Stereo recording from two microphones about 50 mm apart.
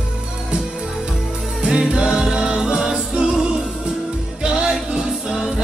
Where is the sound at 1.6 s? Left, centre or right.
Centre.